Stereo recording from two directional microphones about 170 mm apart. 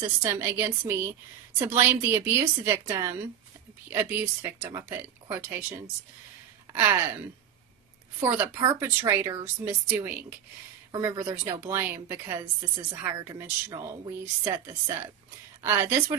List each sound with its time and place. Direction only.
0.0 s a woman's voice: 15° right (ahead or behind)
8.2 s a woman's voice: 15° right (ahead or behind)